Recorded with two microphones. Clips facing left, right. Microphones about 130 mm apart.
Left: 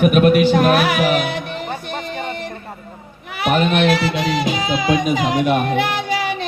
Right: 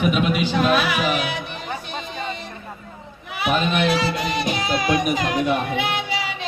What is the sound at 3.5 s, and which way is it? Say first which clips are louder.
Speech: left 5 dB; 60° left (ahead or behind).